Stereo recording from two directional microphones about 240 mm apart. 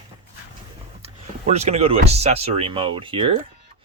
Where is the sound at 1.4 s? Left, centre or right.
Right.